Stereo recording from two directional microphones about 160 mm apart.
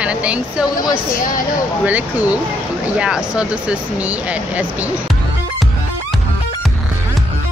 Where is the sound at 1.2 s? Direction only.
60° left (ahead or behind).